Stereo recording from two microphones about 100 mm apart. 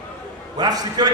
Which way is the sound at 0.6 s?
40° right (ahead or behind).